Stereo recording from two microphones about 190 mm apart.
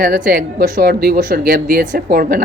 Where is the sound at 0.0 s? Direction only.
45° right (ahead or behind).